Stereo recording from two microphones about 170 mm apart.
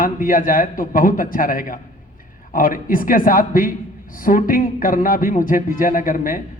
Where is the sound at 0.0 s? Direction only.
55° left (ahead or behind).